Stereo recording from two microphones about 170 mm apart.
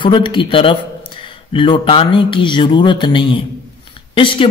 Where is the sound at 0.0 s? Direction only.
30° left (ahead or behind).